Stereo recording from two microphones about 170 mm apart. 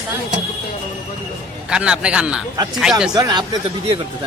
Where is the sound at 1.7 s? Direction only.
5° right (ahead or behind).